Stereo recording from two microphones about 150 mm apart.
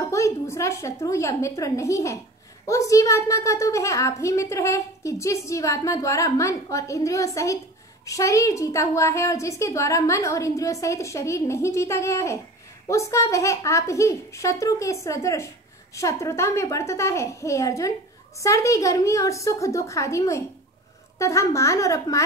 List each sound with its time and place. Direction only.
0.1 s a woman's voice: 20° left (ahead or behind)